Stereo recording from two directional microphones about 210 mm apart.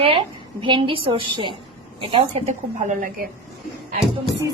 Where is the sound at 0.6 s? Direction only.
25° right (ahead or behind).